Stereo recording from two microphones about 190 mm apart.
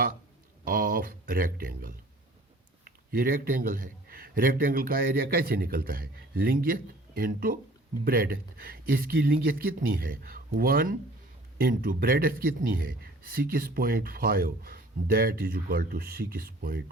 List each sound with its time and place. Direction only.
0.6 s a man's voice: 50° right (ahead or behind)